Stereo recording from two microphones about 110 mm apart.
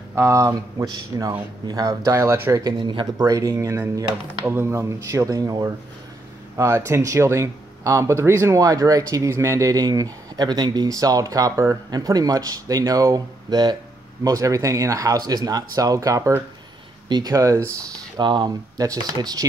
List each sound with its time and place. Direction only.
0.1 s speech: 25° right (ahead or behind)
2.5 s speech: 40° right (ahead or behind)
3.2 s speech: 30° right (ahead or behind)
18.2 s speech: 45° right (ahead or behind)